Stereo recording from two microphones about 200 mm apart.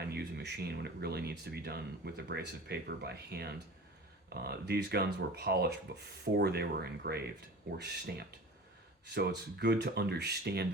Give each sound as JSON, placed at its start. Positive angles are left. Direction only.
{"t": 0.0, "sound": "speech", "side_deg": -55}